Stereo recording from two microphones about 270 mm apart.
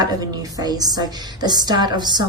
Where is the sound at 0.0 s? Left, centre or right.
Centre.